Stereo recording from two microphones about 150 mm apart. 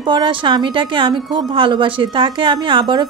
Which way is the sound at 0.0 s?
35° right (ahead or behind).